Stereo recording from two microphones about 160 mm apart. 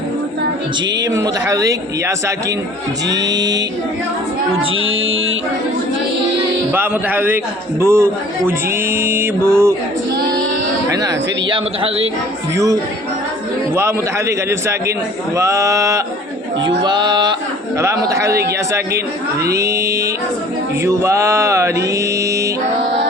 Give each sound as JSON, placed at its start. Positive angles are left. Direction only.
{"t": 1.1, "sound": "a man's voice", "side_deg": -20}
{"t": 6.7, "sound": "mantra", "side_deg": -10}
{"t": 10.8, "sound": "a man's voice", "side_deg": -25}
{"t": 12.5, "sound": "a man's voice", "side_deg": -20}
{"t": 13.7, "sound": "mantra", "side_deg": -15}
{"t": 15.4, "sound": "a man's voice", "side_deg": -20}
{"t": 20.8, "sound": "mantra", "side_deg": -20}